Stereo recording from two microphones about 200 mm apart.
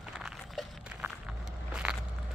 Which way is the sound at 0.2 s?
Centre (ahead or behind).